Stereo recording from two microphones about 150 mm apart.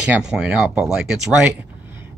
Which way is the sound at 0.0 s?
5° right (ahead or behind).